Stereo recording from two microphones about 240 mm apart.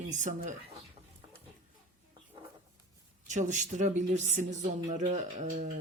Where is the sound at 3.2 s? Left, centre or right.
Right.